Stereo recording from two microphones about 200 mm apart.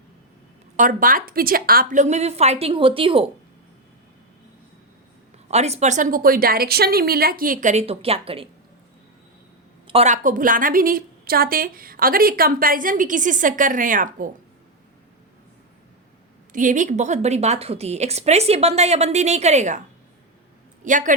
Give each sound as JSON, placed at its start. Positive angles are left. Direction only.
{"t": 0.8, "sound": "a woman's voice", "side_deg": -45}
{"t": 5.5, "sound": "a woman's voice", "side_deg": -35}
{"t": 9.8, "sound": "a woman's voice", "side_deg": -30}
{"t": 16.5, "sound": "a woman's voice", "side_deg": -40}
{"t": 20.8, "sound": "a woman's voice", "side_deg": -40}